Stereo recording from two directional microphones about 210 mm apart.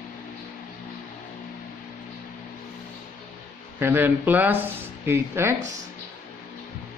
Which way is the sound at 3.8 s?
10° right (ahead or behind).